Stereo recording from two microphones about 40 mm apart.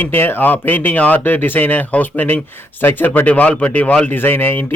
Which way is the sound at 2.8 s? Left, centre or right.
Left.